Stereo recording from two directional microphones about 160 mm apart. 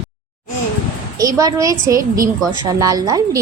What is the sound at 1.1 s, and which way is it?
A woman's voice, 20° right (ahead or behind).